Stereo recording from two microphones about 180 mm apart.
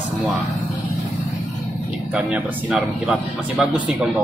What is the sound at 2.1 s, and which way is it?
Speech, 5° right (ahead or behind).